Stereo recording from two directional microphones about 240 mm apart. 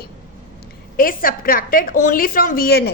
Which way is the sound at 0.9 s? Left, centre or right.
Left.